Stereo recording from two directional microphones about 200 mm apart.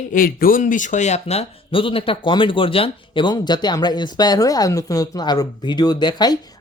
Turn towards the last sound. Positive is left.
turn(degrees=20)  # may be behind; listen again after turning